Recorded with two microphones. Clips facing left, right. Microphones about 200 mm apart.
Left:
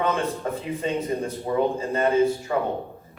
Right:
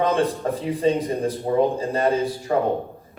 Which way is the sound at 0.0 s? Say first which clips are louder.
Right 4 dB; 35° right (ahead or behind).